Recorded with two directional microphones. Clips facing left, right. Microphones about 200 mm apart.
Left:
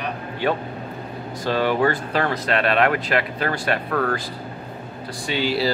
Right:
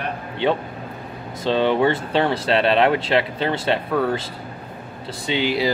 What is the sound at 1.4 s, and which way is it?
Speech, 25° right (ahead or behind).